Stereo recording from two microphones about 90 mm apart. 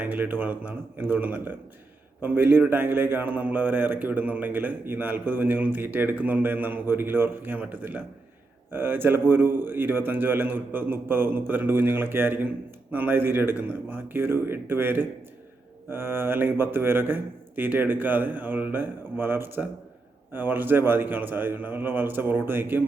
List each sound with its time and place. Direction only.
0.0 s a man's voice: 20° right (ahead or behind)